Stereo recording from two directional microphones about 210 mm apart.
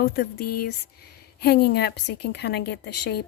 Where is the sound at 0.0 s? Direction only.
50° left (ahead or behind).